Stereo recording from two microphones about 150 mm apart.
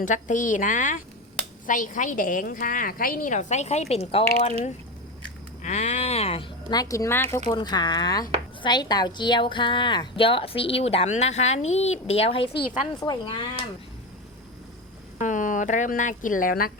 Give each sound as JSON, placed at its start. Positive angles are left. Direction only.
{"t": 0.0, "sound": "a woman's voice", "side_deg": 60}
{"t": 5.6, "sound": "a woman's voice", "side_deg": 50}
{"t": 13.0, "sound": "speech", "side_deg": 30}
{"t": 15.2, "sound": "a woman's voice", "side_deg": 60}